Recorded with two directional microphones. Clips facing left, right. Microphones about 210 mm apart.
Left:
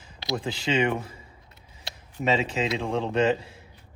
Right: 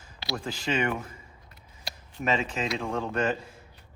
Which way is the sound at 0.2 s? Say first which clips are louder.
Left 4 dB; 20° left (ahead or behind).